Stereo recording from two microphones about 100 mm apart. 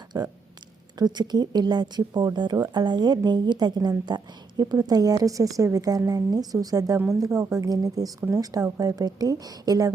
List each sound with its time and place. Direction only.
0.1 s a woman's voice: 45° right (ahead or behind)